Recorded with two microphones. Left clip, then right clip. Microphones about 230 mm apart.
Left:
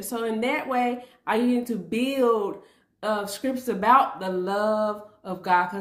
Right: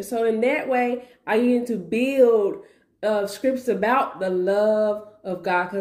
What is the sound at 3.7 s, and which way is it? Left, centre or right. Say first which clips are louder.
Speech: left 5 dB; left.